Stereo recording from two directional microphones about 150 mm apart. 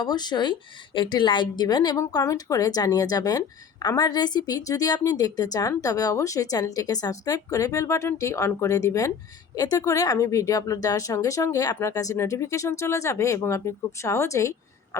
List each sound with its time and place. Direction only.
0.0 s a woman's voice: 25° left (ahead or behind)